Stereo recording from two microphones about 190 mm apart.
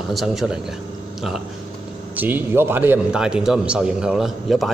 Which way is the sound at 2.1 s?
10° right (ahead or behind).